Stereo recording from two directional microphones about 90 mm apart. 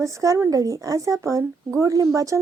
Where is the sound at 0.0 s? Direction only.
35° right (ahead or behind).